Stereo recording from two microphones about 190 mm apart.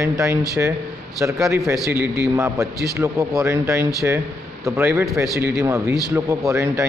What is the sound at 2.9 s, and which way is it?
A man's voice, 15° right (ahead or behind).